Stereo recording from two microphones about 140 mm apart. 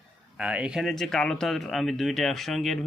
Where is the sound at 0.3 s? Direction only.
10° right (ahead or behind).